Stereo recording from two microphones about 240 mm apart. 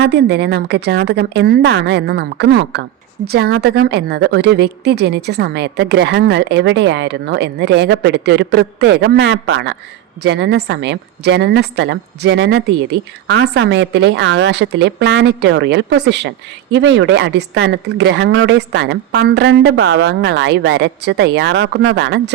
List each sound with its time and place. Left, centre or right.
0.0 s a woman's voice: right